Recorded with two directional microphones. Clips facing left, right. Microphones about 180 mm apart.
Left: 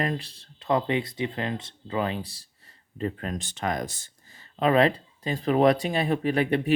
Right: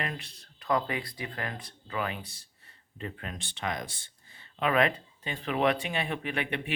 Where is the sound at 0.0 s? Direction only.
35° left (ahead or behind).